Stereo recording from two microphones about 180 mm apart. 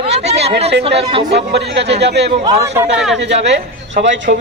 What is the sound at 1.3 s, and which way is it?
Speech, 65° right (ahead or behind).